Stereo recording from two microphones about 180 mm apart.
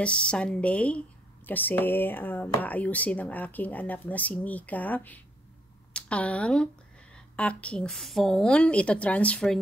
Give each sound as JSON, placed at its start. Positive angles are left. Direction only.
{"t": 0.0, "sound": "a woman's voice", "side_deg": 5}